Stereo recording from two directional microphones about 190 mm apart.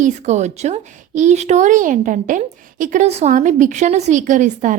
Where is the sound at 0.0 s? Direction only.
35° right (ahead or behind).